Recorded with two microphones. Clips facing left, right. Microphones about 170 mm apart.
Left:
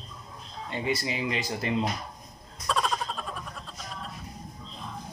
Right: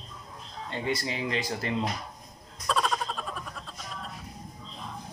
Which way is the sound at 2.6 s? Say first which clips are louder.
Even; centre (ahead or behind).